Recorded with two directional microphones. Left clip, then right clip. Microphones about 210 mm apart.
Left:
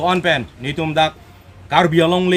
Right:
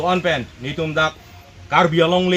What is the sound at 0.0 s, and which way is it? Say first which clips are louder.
A man's voice: left 2 dB; 25° left (ahead or behind).